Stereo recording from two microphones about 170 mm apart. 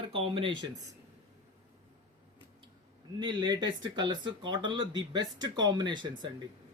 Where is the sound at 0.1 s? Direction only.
30° right (ahead or behind).